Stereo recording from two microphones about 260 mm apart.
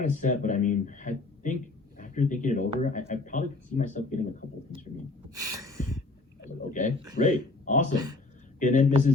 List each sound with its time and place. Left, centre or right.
0.1 s a man's voice: left
6.7 s a man's voice: left